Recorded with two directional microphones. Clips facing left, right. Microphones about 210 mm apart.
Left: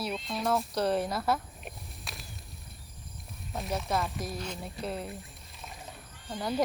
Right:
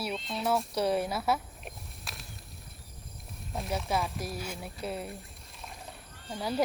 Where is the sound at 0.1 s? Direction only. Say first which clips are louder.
Even; centre (ahead or behind).